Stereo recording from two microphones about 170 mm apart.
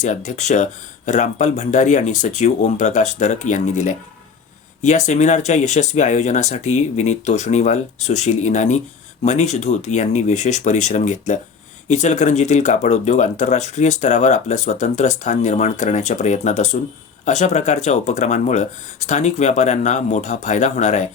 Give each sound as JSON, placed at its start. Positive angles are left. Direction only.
{"t": 0.0, "sound": "speech", "side_deg": 45}